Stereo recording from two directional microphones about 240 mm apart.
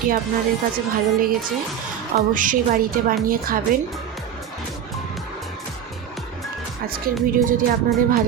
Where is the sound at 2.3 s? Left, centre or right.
Right.